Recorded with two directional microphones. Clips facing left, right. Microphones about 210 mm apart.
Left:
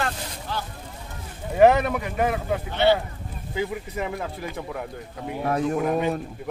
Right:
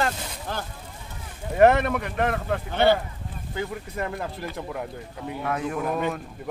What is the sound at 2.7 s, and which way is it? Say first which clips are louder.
Speech: even; 50° right (ahead or behind).